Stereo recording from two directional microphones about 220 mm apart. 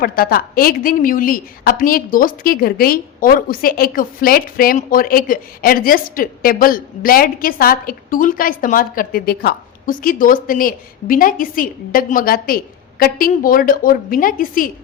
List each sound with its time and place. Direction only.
0.0 s a woman's voice: 40° left (ahead or behind)